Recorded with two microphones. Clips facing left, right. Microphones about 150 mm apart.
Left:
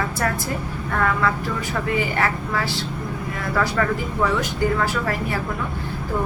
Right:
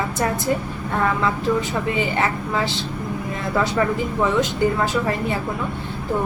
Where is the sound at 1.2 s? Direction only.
20° right (ahead or behind).